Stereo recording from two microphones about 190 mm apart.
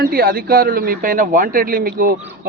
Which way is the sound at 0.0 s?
50° right (ahead or behind).